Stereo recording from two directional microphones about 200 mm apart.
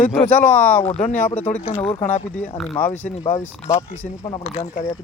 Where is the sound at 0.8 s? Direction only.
35° left (ahead or behind).